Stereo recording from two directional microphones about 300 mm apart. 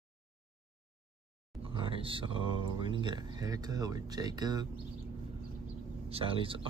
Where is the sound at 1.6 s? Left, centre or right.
Centre.